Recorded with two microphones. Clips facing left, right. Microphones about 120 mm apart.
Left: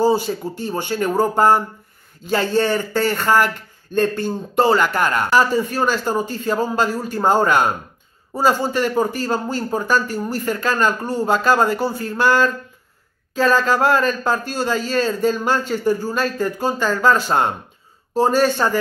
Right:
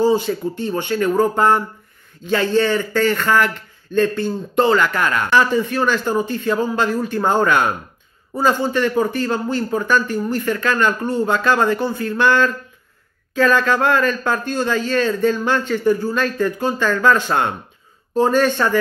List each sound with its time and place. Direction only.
0.2 s speech: 35° left (ahead or behind)